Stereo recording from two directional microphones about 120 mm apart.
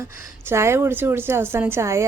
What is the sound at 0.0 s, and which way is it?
A woman's voice, 20° right (ahead or behind).